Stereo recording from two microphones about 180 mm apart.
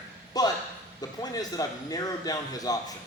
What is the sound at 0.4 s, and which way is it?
A man's voice, 20° left (ahead or behind).